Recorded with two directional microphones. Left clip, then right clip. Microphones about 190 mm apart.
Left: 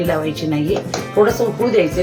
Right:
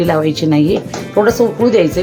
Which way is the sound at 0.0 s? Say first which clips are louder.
Right 5 dB; 50° right (ahead or behind).